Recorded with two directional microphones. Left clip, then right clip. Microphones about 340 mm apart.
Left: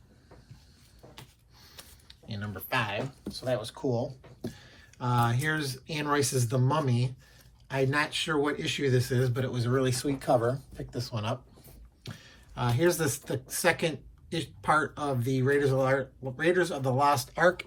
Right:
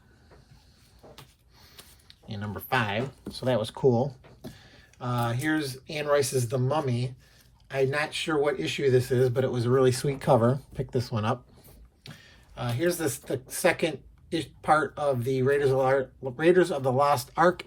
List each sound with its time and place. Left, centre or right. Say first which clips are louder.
1.5 s a sound: even; centre
3.3 s speech: right 4 dB; right
4.5 s speech: left 1 dB; centre
12.0 s speech: left 1 dB; centre